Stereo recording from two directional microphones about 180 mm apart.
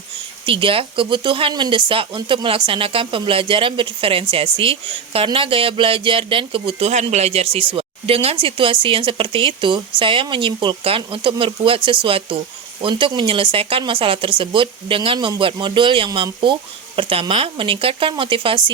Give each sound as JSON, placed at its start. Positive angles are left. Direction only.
{"t": 0.4, "sound": "speech", "side_deg": -30}